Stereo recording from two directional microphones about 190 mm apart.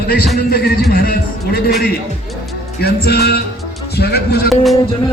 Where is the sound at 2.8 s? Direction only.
55° left (ahead or behind).